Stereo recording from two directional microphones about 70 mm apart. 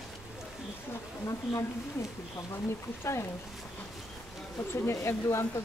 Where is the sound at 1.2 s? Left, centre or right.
Left.